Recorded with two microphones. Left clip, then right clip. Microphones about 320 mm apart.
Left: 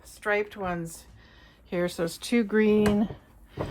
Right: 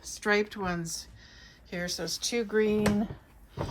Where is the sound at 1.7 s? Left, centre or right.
Centre.